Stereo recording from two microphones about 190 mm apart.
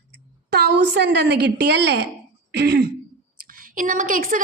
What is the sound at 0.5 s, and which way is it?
A woman's voice, 60° right (ahead or behind).